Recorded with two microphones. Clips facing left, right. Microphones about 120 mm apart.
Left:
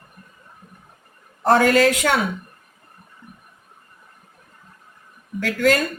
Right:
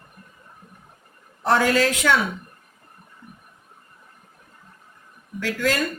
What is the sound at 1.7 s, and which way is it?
Speech, 50° left (ahead or behind).